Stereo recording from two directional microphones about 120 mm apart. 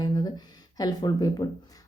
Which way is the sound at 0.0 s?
35° left (ahead or behind).